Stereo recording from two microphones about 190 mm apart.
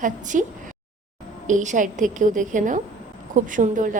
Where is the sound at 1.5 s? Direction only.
40° right (ahead or behind).